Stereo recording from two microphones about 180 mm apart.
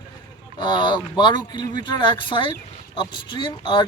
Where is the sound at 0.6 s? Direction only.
25° left (ahead or behind).